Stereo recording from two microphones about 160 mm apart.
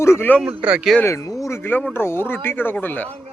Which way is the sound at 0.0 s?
15° left (ahead or behind).